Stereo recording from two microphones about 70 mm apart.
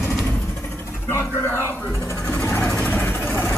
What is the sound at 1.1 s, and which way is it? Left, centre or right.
Speech, left.